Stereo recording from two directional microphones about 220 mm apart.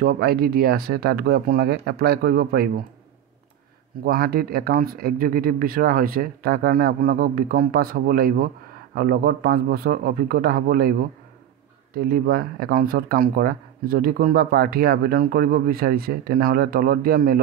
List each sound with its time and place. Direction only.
0.0 s speech: 45° right (ahead or behind)
4.0 s speech: 40° right (ahead or behind)